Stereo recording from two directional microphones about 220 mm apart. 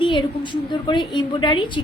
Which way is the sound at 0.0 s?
20° left (ahead or behind).